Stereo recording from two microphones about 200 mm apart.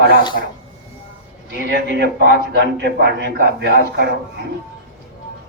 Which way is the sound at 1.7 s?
55° right (ahead or behind).